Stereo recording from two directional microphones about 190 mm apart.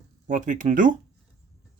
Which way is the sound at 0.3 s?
40° right (ahead or behind).